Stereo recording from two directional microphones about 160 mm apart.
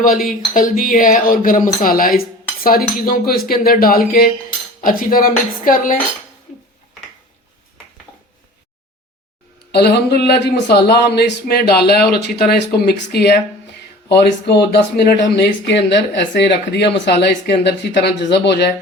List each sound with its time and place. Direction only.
0.5 s speech: 60° left (ahead or behind)
2.6 s cutlery: 65° left (ahead or behind)
4.8 s speech: 60° left (ahead or behind)
9.7 s speech: 90° left